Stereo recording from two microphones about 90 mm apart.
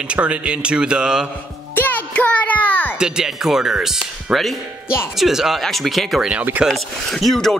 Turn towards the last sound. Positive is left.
turn(degrees=5)  # may be behind; listen again after turning